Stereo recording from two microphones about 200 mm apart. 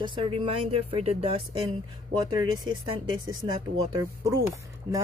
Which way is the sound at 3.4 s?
20° right (ahead or behind).